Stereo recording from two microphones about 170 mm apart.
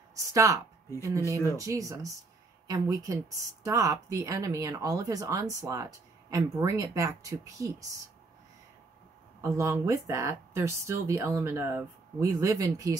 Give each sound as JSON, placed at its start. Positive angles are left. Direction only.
{"t": 0.1, "sound": "speech", "side_deg": -20}
{"t": 9.4, "sound": "speech", "side_deg": -15}